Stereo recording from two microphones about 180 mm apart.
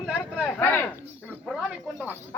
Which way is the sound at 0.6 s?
10° left (ahead or behind).